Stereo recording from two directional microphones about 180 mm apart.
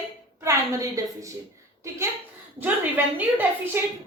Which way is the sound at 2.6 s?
10° right (ahead or behind).